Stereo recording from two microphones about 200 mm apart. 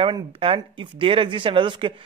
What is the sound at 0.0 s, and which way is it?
Speech, 25° right (ahead or behind).